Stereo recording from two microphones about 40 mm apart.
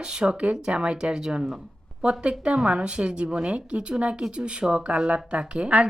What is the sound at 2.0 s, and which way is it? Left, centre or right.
Speech, right.